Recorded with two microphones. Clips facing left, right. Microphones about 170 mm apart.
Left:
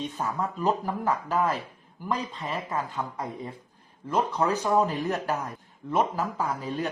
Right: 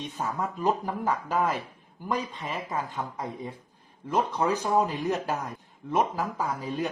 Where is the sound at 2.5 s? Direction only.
20° right (ahead or behind).